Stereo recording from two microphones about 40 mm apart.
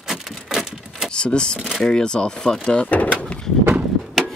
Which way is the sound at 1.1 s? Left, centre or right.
Left.